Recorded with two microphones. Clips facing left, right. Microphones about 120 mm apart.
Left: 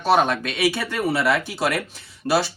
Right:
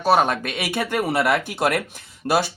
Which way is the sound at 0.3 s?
50° right (ahead or behind).